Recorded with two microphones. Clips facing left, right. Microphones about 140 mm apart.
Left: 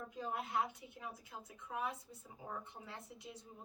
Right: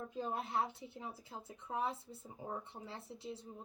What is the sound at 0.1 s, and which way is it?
Speech, 30° right (ahead or behind).